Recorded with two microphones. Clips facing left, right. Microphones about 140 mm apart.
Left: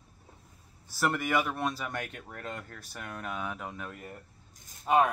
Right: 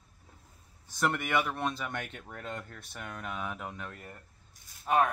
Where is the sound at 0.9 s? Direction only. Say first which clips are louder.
Left 1 dB; 5° left (ahead or behind).